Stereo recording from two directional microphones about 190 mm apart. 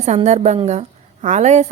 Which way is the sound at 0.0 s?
35° right (ahead or behind).